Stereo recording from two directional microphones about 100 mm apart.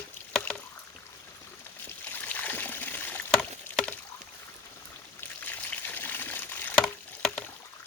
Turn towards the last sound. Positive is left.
turn(degrees=5)  # may be behind; listen again after turning